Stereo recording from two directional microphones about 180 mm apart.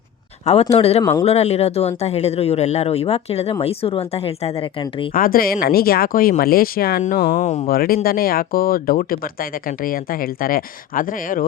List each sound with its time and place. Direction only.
0.7 s speech: 35° left (ahead or behind)
5.1 s speech: 50° left (ahead or behind)
7.0 s speech: 40° left (ahead or behind)
7.8 s speech: 55° left (ahead or behind)